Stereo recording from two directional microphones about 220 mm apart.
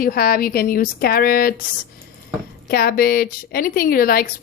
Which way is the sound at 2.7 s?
45° left (ahead or behind).